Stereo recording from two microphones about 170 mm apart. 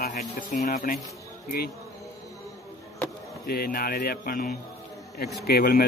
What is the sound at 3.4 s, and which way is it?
Speech, 60° left (ahead or behind).